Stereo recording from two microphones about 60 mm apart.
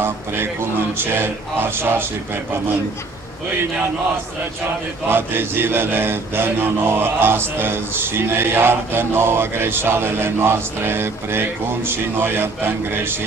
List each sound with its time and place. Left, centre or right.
0.0 s mantra: right
5.1 s mantra: right